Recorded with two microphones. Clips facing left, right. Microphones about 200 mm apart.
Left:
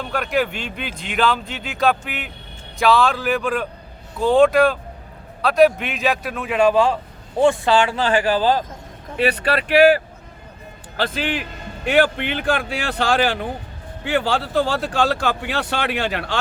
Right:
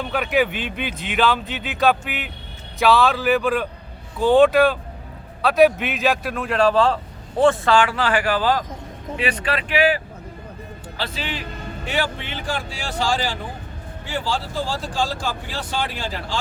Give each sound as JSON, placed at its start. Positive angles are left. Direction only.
{"t": 0.0, "sound": "a man's voice", "side_deg": -5}
{"t": 7.6, "sound": "speech", "side_deg": 20}
{"t": 9.6, "sound": "a man's voice", "side_deg": 45}